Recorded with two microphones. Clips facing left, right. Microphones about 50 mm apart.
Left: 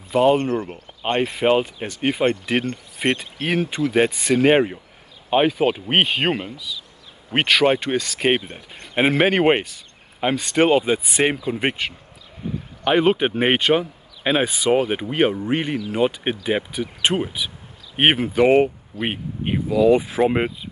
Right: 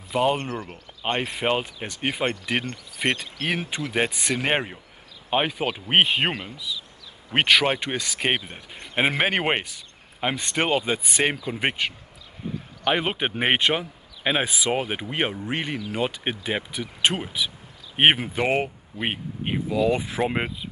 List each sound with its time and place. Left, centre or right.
0.1 s speech: centre
0.5 s speech: left
1.0 s speech: centre
7.3 s speech: centre